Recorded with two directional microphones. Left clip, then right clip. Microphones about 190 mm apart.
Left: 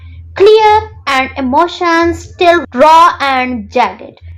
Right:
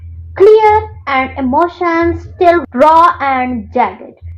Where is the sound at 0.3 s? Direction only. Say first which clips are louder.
Left 1 dB; 30° left (ahead or behind).